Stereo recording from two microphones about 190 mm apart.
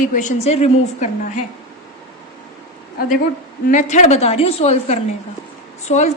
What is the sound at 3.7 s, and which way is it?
A woman's voice, 40° left (ahead or behind).